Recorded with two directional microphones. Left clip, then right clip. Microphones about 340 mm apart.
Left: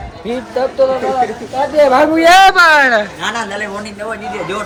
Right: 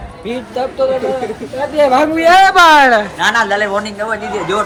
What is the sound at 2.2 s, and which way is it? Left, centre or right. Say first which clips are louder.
Speech: left 1 dB; left.